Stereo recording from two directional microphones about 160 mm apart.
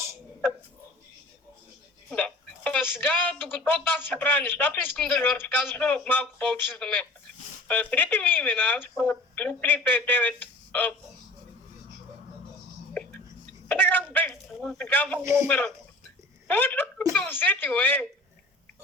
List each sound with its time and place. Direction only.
2.0 s speech: 10° left (ahead or behind)
12.9 s whispering: 10° left (ahead or behind)
13.7 s a sound: 10° left (ahead or behind)
15.2 s speech: 15° right (ahead or behind)
15.4 s speech: 5° left (ahead or behind)